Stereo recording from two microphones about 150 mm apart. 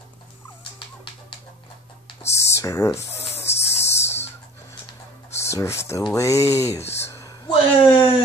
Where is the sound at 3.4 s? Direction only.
45° left (ahead or behind).